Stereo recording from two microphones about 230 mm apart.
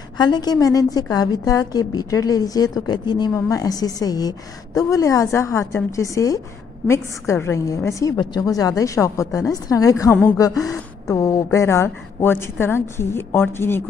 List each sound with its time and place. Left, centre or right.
0.2 s a woman's voice: centre